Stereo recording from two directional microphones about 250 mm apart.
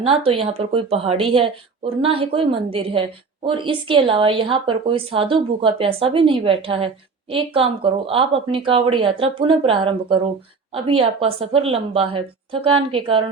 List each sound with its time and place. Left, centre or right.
0.0 s a woman's voice: right